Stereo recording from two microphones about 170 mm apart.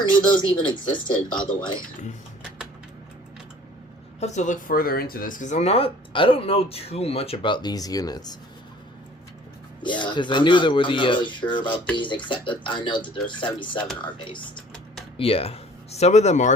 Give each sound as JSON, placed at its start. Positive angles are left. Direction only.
{"t": 0.3, "sound": "speech", "side_deg": 25}
{"t": 4.2, "sound": "speech", "side_deg": 45}
{"t": 9.8, "sound": "speech", "side_deg": 25}